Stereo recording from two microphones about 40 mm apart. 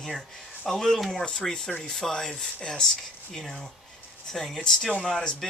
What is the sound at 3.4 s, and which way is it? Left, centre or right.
Speech, centre.